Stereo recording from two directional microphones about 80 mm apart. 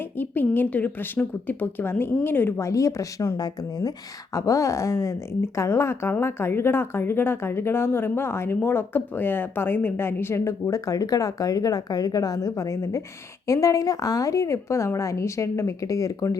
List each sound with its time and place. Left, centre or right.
0.2 s a woman's voice: left
4.4 s a woman's voice: left